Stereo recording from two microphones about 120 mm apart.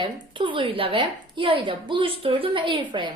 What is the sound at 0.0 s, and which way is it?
A woman's voice, 45° right (ahead or behind).